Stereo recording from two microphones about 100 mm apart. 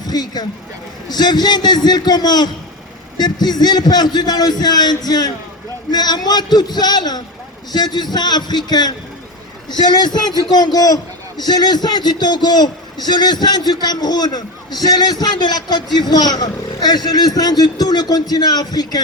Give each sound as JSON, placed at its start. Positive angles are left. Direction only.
{"t": 0.0, "sound": "a man's voice", "side_deg": 40}